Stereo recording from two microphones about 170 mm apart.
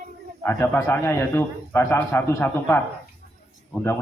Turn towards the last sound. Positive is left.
turn(degrees=10)  # may be behind; listen again after turning